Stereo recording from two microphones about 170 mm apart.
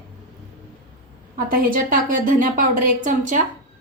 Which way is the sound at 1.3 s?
55° right (ahead or behind).